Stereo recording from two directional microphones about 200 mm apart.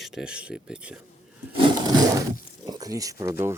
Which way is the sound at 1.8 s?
20° right (ahead or behind).